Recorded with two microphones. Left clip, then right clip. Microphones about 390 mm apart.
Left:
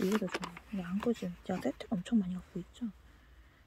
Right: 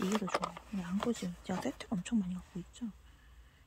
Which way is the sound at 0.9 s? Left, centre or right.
Centre.